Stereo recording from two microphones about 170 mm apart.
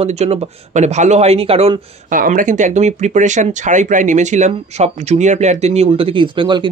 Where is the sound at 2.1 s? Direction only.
50° right (ahead or behind).